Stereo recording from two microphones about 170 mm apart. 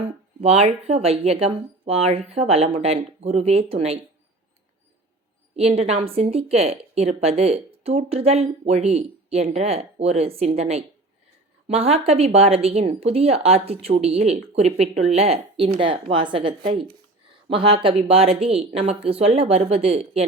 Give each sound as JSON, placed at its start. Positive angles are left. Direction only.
{"t": 0.4, "sound": "a woman's voice", "side_deg": -40}
{"t": 5.5, "sound": "a woman's voice", "side_deg": -40}